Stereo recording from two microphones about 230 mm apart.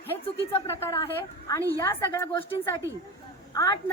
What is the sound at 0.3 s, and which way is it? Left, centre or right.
A woman's voice, centre.